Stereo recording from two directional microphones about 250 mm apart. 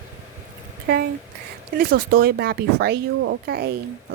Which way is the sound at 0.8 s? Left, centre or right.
Right.